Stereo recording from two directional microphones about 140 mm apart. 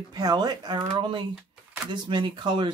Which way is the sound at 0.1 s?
30° right (ahead or behind).